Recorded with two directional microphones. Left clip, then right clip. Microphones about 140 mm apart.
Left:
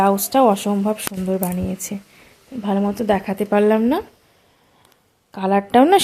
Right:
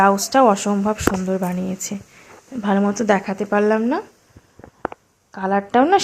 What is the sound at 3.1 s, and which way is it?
Speech, 20° left (ahead or behind).